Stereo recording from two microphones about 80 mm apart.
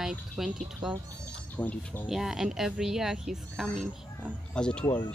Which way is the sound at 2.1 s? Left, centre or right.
Centre.